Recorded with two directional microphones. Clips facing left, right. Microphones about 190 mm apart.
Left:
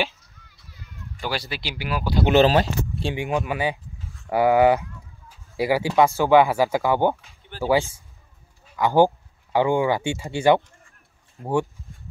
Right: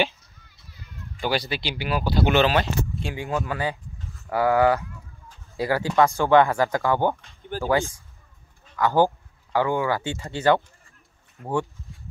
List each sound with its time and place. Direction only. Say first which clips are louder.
1.2 s speech: right 3 dB; centre (ahead or behind)
2.3 s speech: left 6 dB; 35° left (ahead or behind)
3.2 s speech: left 2 dB; 15° left (ahead or behind)
8.6 s speech: left 2 dB; 15° left (ahead or behind)
11.4 s speech: left 3 dB; 25° left (ahead or behind)